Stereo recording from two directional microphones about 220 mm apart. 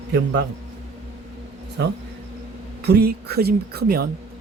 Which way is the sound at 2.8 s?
45° right (ahead or behind).